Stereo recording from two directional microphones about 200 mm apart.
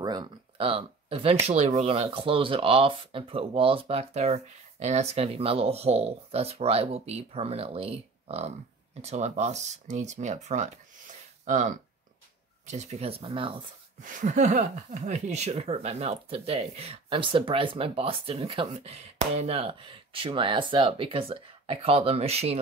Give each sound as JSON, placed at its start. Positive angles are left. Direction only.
{"t": 0.0, "sound": "speech", "side_deg": -20}
{"t": 14.0, "sound": "speech", "side_deg": -40}